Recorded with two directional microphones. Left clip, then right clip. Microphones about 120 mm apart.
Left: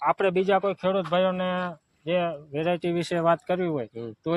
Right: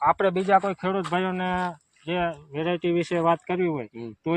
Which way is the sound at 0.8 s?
25° left (ahead or behind).